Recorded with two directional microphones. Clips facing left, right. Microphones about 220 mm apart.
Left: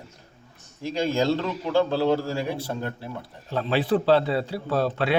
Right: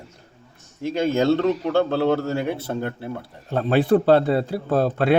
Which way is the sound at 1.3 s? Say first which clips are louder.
Right 7 dB; centre (ahead or behind).